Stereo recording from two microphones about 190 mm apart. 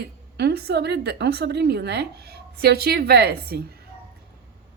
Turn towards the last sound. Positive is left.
turn(degrees=-55)  # may be behind; listen again after turning